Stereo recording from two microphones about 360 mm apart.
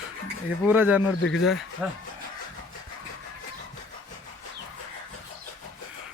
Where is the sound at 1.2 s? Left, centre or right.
Left.